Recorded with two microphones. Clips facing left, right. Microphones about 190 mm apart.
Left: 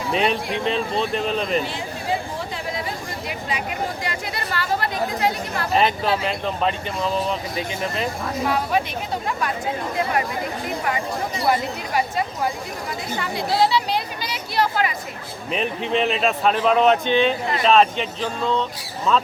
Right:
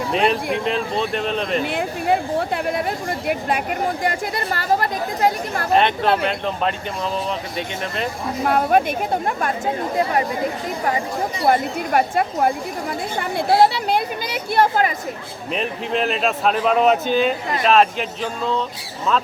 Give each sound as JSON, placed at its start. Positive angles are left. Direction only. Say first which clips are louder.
{"t": 0.1, "sound": "speech", "louder": "right 1 dB", "side_deg": 0}
{"t": 1.6, "sound": "speech", "louder": "right 6 dB", "side_deg": -60}
{"t": 5.7, "sound": "speech", "louder": "right 3 dB", "side_deg": 0}
{"t": 8.4, "sound": "speech", "louder": "right 6 dB", "side_deg": -55}
{"t": 11.4, "sound": "speech", "louder": "right 4 dB", "side_deg": -55}
{"t": 15.5, "sound": "speech", "louder": "left 1 dB", "side_deg": 0}